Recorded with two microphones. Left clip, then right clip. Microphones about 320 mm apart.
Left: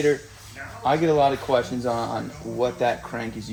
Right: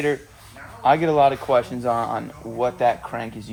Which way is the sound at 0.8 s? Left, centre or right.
Right.